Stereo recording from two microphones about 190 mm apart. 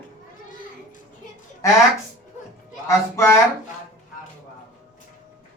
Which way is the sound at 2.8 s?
15° left (ahead or behind).